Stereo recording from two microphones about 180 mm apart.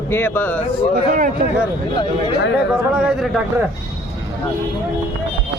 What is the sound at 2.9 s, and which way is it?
Speech, 5° right (ahead or behind).